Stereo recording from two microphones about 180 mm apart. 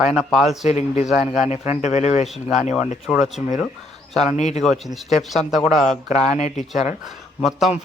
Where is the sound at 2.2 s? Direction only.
Centre (ahead or behind).